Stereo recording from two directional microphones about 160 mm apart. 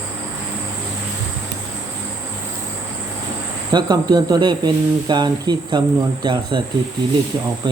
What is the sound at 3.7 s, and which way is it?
Speech, 25° right (ahead or behind).